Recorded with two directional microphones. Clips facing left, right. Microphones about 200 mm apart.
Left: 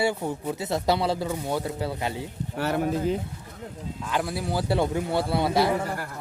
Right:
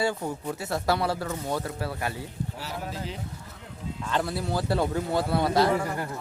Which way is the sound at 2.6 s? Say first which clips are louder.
Left 14 dB; 60° left (ahead or behind).